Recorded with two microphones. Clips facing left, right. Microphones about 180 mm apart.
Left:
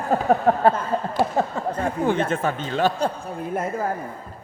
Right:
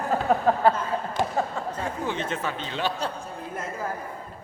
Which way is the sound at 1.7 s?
55° left (ahead or behind).